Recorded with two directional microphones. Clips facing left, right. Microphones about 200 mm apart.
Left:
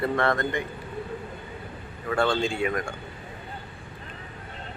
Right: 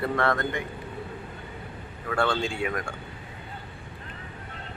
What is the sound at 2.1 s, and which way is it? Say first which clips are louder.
Speech: left 2 dB; 15° left (ahead or behind).